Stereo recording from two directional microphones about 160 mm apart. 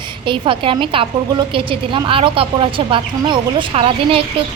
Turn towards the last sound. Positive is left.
turn(degrees=-35)  # may be behind; listen again after turning